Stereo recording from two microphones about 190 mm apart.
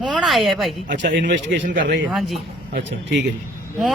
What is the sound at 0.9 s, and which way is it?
Speech, 45° right (ahead or behind).